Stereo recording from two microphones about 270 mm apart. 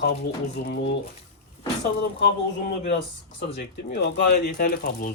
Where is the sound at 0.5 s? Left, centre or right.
Left.